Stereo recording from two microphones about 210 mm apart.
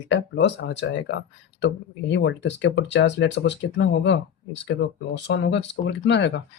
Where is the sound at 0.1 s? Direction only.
55° left (ahead or behind).